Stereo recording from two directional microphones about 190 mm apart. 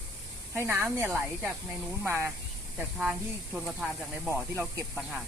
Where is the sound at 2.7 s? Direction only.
5° right (ahead or behind).